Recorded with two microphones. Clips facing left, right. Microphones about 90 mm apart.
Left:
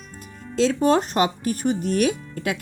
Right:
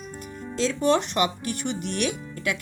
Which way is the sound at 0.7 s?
40° left (ahead or behind).